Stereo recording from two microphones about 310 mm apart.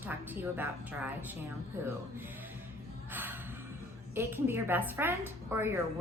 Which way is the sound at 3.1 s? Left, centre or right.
Centre.